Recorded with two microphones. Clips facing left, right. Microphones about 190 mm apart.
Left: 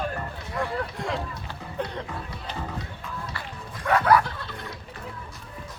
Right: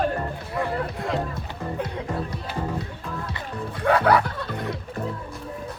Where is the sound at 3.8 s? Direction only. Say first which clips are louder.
Right 2 dB; 65° right (ahead or behind).